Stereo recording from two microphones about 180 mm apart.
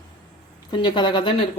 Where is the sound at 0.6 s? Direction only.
25° left (ahead or behind).